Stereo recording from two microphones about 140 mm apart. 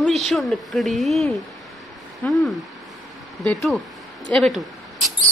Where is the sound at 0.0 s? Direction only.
Centre (ahead or behind).